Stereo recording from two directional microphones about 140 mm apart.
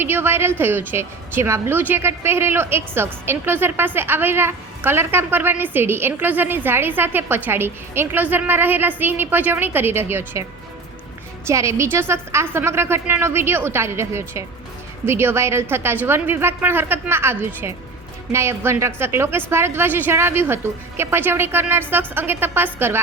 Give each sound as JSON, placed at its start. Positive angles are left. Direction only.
{"t": 0.0, "sound": "speech", "side_deg": -15}
{"t": 11.4, "sound": "a woman's voice", "side_deg": -20}